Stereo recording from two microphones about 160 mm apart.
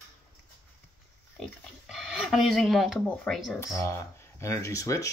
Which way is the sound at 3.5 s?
15° left (ahead or behind).